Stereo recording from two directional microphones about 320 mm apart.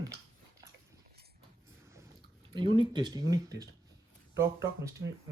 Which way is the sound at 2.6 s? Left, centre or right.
Centre.